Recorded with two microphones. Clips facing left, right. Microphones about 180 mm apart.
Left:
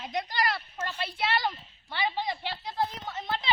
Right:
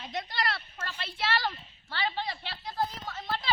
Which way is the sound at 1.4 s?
15° left (ahead or behind).